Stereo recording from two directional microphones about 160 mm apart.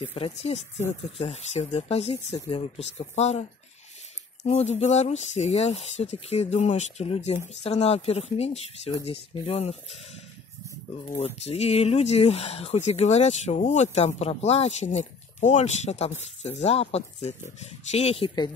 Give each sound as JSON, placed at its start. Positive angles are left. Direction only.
{"t": 0.0, "sound": "speech", "side_deg": 35}
{"t": 4.5, "sound": "speech", "side_deg": 40}
{"t": 11.1, "sound": "speech", "side_deg": 40}